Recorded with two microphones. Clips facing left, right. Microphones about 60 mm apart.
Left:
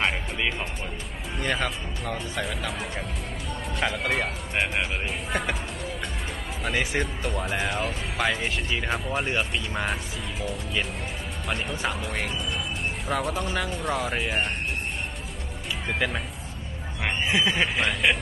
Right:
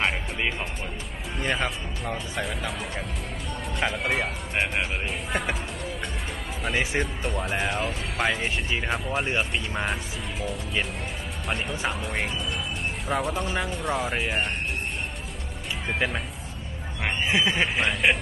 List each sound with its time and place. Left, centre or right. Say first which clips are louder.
0.0 s music: even; centre
1.4 s speech: even; centre
7.0 s speech: even; centre
15.9 s speech: even; centre
17.2 s speech: even; right
17.6 s speech: even; centre